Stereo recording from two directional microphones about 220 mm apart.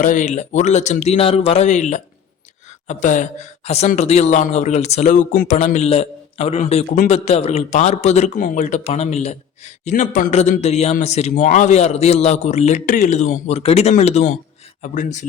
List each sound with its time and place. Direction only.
0.0 s speech: 35° left (ahead or behind)